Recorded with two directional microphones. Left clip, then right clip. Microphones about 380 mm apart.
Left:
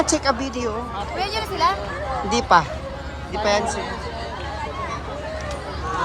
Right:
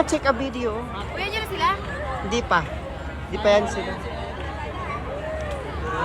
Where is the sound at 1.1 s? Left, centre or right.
Left.